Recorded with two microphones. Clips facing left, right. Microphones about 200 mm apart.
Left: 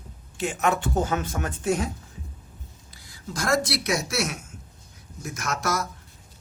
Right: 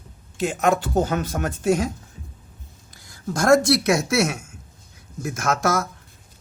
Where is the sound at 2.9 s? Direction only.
45° right (ahead or behind).